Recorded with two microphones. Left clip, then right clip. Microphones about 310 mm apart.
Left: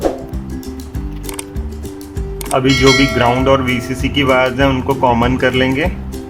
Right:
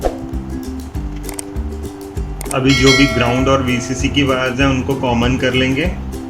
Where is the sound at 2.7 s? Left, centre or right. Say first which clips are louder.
Even; centre.